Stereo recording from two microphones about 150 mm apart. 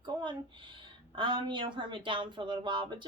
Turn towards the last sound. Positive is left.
turn(degrees=-30)  # may be behind; listen again after turning